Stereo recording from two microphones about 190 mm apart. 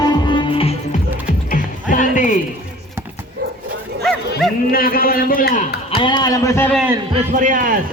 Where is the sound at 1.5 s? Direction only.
45° left (ahead or behind).